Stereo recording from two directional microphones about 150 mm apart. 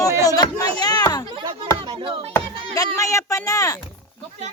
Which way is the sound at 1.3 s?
30° right (ahead or behind).